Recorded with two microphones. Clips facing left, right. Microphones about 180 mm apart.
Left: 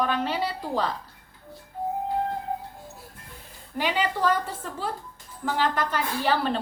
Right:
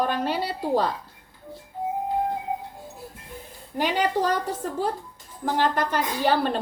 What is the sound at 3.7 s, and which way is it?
Speech, 45° right (ahead or behind).